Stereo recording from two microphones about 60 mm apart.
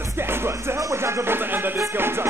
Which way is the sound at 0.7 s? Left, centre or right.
Right.